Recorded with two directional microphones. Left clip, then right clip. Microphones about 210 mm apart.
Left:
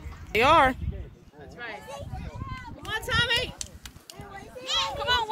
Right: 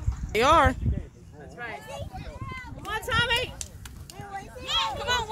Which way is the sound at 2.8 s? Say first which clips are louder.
Even; 30° right (ahead or behind).